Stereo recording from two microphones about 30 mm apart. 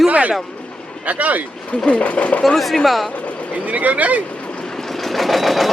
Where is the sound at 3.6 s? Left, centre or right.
Right.